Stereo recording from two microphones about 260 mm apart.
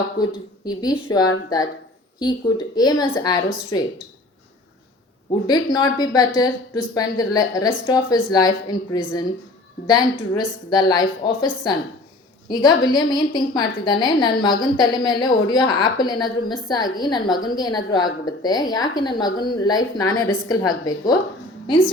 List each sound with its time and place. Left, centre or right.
0.2 s a woman's voice: centre
2.7 s a woman's voice: centre
5.5 s a woman's voice: centre